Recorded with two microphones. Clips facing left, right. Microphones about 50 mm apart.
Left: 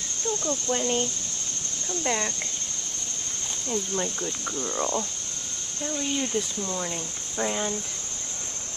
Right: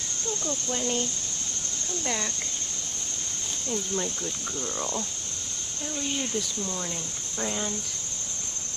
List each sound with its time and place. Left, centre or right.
0.4 s speech: centre
3.7 s speech: centre